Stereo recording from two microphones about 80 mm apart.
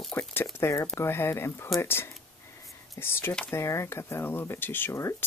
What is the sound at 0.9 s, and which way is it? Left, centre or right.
Speech, left.